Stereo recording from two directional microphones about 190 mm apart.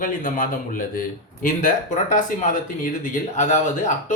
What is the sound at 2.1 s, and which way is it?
Speech, 45° left (ahead or behind).